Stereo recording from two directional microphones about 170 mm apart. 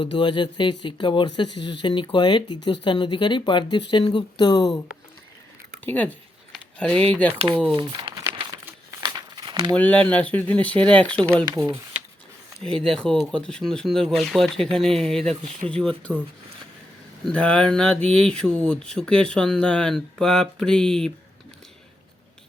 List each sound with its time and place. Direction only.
0.0 s speech: 30° left (ahead or behind)
5.8 s speech: 10° left (ahead or behind)
6.5 s a sound: 5° left (ahead or behind)
7.1 s speech: 10° left (ahead or behind)
7.8 s crumpling: 30° right (ahead or behind)
9.7 s speech: 10° left (ahead or behind)
11.5 s speech: 20° right (ahead or behind)
12.6 s speech: 5° left (ahead or behind)
17.2 s speech: 5° left (ahead or behind)